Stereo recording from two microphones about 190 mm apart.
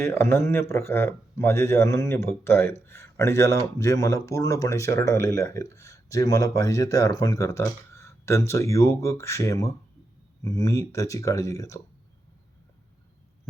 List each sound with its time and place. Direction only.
0.0 s speech: 15° left (ahead or behind)